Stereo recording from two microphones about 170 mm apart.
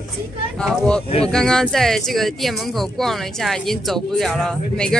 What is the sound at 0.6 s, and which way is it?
A woman's voice, 5° left (ahead or behind).